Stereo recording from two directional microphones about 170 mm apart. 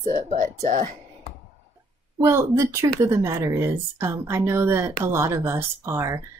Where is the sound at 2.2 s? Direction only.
15° right (ahead or behind).